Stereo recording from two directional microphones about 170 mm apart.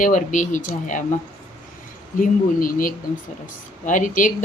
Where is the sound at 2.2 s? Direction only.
55° left (ahead or behind).